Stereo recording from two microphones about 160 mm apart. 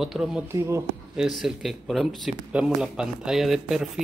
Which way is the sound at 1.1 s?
5° right (ahead or behind).